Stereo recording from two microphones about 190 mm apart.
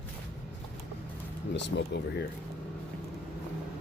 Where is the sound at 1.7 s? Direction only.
70° left (ahead or behind).